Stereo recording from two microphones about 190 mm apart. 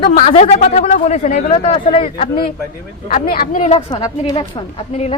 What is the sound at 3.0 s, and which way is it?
Speech, 45° left (ahead or behind).